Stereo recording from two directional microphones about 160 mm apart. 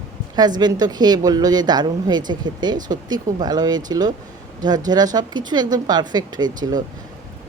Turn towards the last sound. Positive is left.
turn(degrees=-25)  # may be behind; listen again after turning